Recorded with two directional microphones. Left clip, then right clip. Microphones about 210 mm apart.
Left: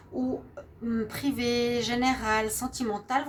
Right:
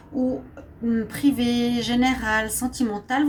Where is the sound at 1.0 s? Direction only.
40° left (ahead or behind).